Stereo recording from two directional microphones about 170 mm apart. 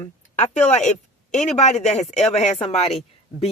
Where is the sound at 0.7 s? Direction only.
45° left (ahead or behind).